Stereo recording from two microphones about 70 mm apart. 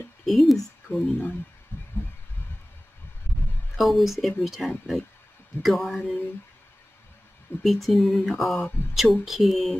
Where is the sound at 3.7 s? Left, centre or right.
Centre.